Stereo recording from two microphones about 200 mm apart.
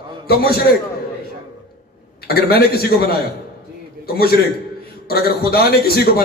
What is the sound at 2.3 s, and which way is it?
Speech, 50° left (ahead or behind).